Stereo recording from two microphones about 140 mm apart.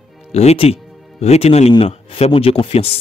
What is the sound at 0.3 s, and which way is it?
Speech, 50° left (ahead or behind).